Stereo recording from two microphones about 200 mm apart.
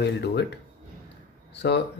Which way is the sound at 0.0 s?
55° left (ahead or behind).